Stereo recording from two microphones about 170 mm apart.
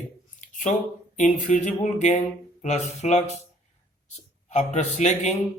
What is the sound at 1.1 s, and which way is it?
A man's voice, 45° left (ahead or behind).